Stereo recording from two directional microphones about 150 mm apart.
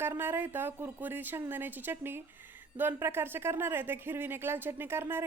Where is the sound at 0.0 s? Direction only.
15° right (ahead or behind).